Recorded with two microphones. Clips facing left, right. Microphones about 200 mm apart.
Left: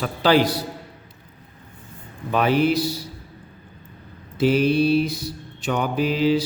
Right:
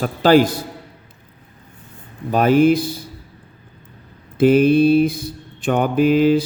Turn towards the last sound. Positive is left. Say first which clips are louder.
# right 6 dB
turn(degrees=-50)  # may be behind; listen again after turning